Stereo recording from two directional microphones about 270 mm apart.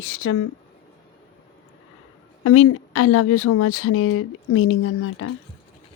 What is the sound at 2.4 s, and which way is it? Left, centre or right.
Speech, left.